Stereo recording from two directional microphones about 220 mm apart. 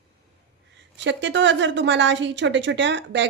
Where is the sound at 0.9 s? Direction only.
55° right (ahead or behind).